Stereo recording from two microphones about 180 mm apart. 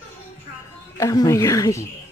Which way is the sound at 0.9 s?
15° left (ahead or behind).